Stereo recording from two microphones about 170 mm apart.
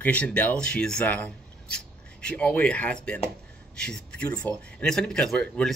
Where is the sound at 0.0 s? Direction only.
10° left (ahead or behind).